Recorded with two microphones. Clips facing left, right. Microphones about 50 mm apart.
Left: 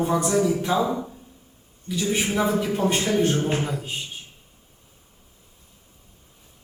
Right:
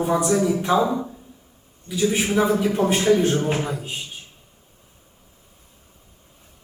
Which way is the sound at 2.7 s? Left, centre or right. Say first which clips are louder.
Right 5 dB; right.